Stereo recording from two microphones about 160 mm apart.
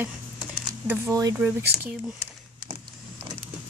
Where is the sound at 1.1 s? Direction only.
25° right (ahead or behind).